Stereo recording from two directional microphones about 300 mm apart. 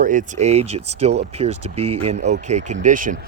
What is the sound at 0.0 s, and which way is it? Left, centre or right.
Speech, right.